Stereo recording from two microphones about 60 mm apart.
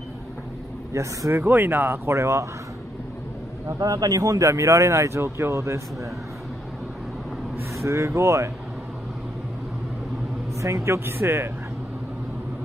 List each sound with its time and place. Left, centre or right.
0.9 s speech: right
1.4 s speech: right
3.6 s speech: right
7.7 s speech: right
10.6 s speech: right